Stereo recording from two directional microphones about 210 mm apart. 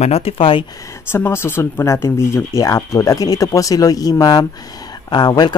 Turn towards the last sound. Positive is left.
turn(degrees=20)  # may be behind; listen again after turning